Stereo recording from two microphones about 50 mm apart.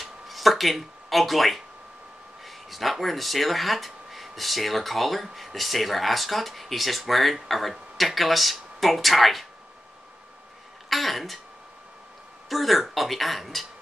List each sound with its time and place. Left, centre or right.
0.0 s a sound: centre
2.4 s speech: centre
10.9 s throat clearing: centre
12.4 s speech: centre